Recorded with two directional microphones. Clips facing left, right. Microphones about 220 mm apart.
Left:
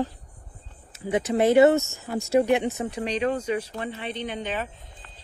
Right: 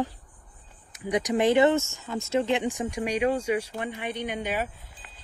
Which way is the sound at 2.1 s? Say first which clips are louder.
Left 4 dB; 40° left (ahead or behind).